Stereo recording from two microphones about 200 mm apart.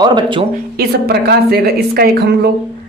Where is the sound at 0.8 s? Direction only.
50° right (ahead or behind).